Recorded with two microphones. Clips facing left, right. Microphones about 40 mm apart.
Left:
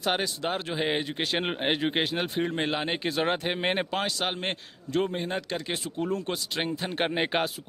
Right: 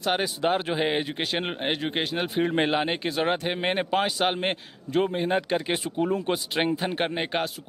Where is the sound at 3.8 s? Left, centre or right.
Centre.